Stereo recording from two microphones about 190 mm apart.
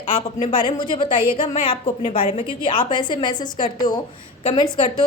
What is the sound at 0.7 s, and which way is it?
A woman's voice, 25° left (ahead or behind).